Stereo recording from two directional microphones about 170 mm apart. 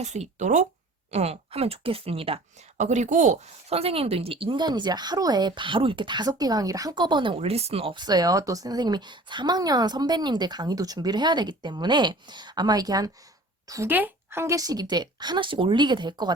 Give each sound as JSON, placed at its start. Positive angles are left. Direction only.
{"t": 0.0, "sound": "speech", "side_deg": -40}